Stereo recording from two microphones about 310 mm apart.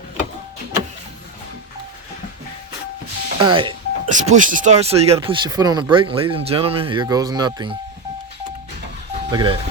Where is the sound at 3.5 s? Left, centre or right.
Centre.